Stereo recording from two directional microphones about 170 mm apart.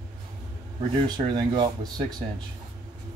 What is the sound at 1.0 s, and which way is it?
Speech, 25° right (ahead or behind).